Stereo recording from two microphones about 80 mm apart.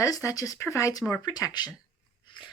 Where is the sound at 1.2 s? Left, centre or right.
Left.